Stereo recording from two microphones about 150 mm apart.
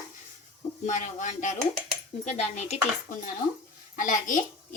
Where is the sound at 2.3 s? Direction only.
45° left (ahead or behind).